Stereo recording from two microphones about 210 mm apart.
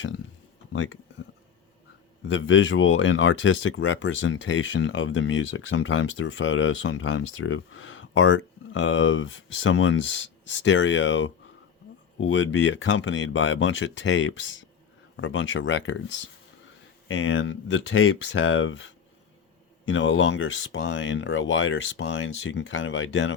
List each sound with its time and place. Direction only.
0.7 s speech: 75° left (ahead or behind)
2.2 s speech: 60° left (ahead or behind)
17.1 s speech: 65° left (ahead or behind)
19.9 s speech: 60° left (ahead or behind)